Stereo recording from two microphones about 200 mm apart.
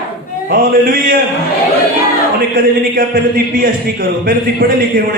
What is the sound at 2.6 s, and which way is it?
A man's voice, 45° right (ahead or behind).